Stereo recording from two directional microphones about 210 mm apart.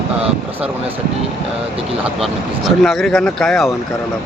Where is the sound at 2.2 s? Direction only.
Centre (ahead or behind).